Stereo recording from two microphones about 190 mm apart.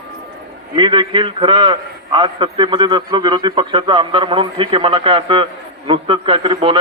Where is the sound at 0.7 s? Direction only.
25° right (ahead or behind).